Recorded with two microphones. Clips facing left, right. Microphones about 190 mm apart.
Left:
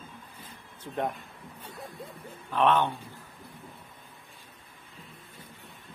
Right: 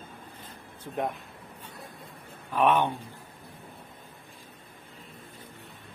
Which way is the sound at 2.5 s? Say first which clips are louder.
Right 1 dB; 10° right (ahead or behind).